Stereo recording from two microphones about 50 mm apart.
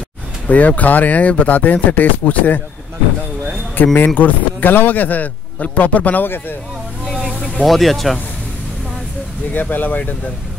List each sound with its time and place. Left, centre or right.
0.5 s speech: left
3.9 s speech: left
6.2 s a man's voice: left
7.1 s music: centre
7.6 s speech: centre
9.5 s speech: left